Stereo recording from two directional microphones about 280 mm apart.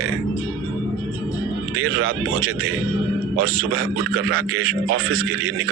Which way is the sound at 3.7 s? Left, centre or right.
Right.